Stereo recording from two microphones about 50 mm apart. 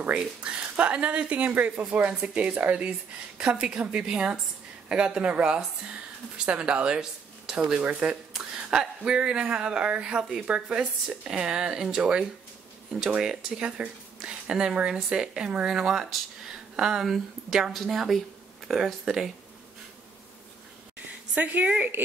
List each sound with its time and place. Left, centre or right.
0.1 s speech: centre
10.8 s a woman's voice: centre
21.4 s a woman's voice: right